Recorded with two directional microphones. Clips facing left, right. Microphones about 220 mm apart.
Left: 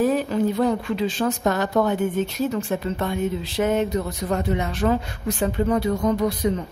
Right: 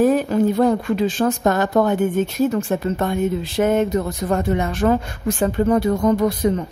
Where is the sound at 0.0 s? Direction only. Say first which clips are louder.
Right 4 dB; 50° right (ahead or behind).